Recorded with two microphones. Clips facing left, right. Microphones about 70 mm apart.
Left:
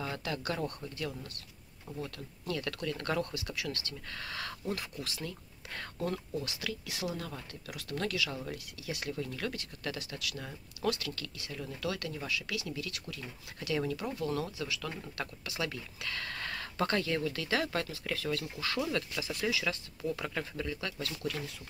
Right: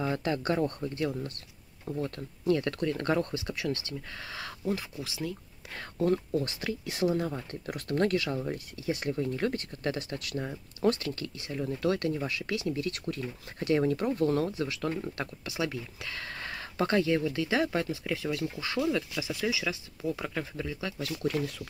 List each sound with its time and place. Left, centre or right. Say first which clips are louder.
0.0 s speech: right 7 dB; right
5.9 s speech: right 9 dB; right
7.7 s speech: right 8 dB; right
8.4 s speech: right 6 dB; right